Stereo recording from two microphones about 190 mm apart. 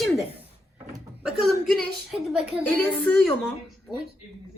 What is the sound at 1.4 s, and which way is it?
A woman's voice, centre (ahead or behind).